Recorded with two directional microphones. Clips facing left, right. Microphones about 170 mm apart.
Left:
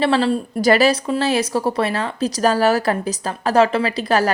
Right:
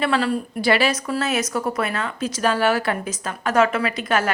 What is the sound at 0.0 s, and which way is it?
Speech, 30° left (ahead or behind).